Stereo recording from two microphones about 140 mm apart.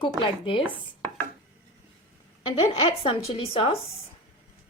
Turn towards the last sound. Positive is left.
turn(degrees=40)  # may be behind; listen again after turning